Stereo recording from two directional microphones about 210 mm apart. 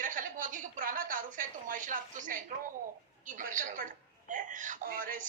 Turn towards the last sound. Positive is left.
turn(degrees=-40)  # may be behind; listen again after turning